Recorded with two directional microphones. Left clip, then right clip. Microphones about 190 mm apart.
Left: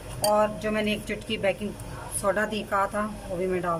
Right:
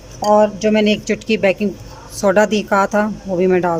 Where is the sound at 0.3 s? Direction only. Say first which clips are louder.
Right 11 dB; 40° right (ahead or behind).